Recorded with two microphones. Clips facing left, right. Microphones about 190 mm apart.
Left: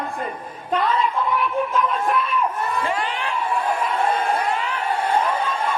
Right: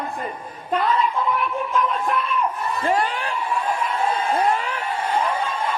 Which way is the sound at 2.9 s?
40° right (ahead or behind).